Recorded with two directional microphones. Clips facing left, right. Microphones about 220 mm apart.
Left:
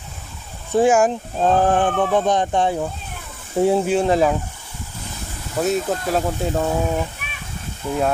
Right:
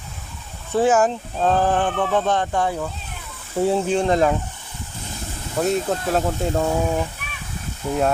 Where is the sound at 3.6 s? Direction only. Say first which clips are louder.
Left 2 dB; 10° left (ahead or behind).